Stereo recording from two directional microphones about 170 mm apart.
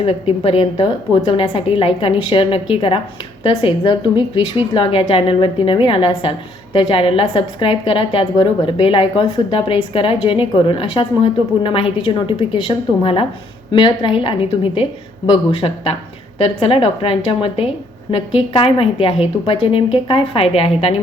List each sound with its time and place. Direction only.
0.0 s a woman's voice: 35° left (ahead or behind)